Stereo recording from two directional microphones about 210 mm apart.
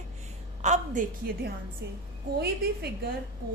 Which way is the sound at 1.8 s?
55° right (ahead or behind).